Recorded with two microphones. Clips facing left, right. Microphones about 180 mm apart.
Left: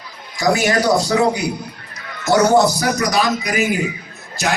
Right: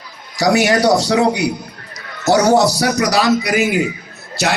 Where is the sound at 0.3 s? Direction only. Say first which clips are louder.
Right 3 dB; 70° right (ahead or behind).